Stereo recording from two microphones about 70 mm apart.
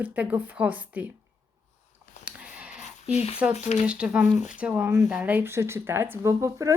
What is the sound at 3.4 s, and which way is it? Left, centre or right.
Speech, centre.